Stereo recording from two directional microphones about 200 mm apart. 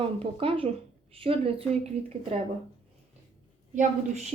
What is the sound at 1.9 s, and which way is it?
Speech, 30° right (ahead or behind).